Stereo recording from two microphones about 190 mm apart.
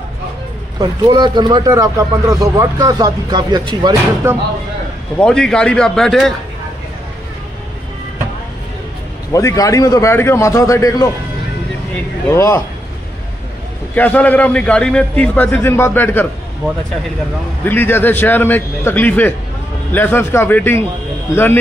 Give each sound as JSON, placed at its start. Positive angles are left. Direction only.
{"t": 0.7, "sound": "speech", "side_deg": -25}
{"t": 5.2, "sound": "a man's voice", "side_deg": 5}
{"t": 9.3, "sound": "a man's voice", "side_deg": 15}
{"t": 12.3, "sound": "a man's voice", "side_deg": 15}
{"t": 13.9, "sound": "a man's voice", "side_deg": 10}
{"t": 17.6, "sound": "a man's voice", "side_deg": 10}